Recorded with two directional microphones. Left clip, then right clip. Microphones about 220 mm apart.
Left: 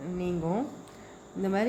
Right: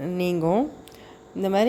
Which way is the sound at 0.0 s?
45° right (ahead or behind).